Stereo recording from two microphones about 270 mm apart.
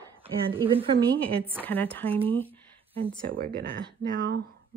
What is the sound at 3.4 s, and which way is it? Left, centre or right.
Speech, right.